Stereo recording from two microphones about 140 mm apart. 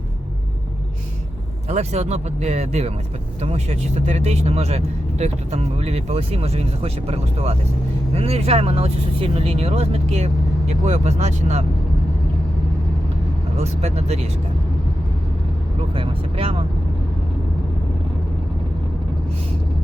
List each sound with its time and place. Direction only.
1.7 s speech: 50° right (ahead or behind)
13.6 s speech: 50° right (ahead or behind)
16.0 s speech: 40° right (ahead or behind)